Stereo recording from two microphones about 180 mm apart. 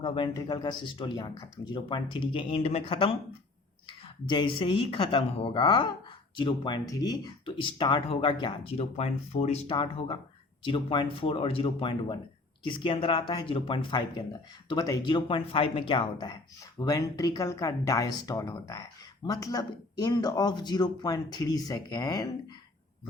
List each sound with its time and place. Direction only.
0.0 s speech: 30° left (ahead or behind)